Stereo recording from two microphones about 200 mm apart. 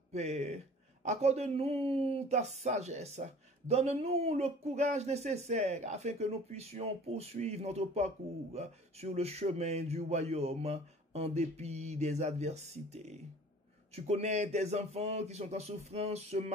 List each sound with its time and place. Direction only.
0.1 s speech: 30° right (ahead or behind)